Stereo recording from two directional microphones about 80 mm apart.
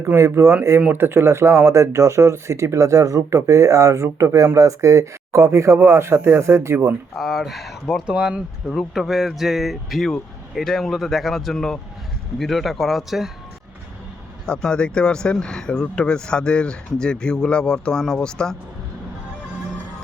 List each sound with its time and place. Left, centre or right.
0.0 s speech: right
7.2 s speech: centre
14.4 s speech: centre